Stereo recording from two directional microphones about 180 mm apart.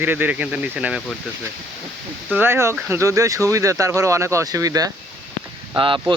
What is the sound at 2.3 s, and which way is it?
Speech, 10° right (ahead or behind).